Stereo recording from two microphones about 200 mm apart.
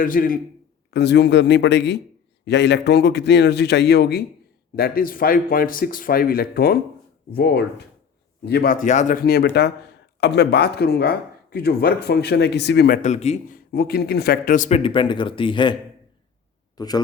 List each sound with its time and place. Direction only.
0.0 s speech: 45° left (ahead or behind)
0.9 s speech: 55° left (ahead or behind)
13.0 s speech: 35° left (ahead or behind)
13.7 s speech: 50° left (ahead or behind)
14.8 s a man's voice: 25° left (ahead or behind)